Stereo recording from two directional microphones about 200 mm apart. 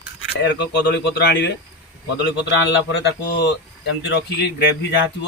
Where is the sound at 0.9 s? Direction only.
60° left (ahead or behind).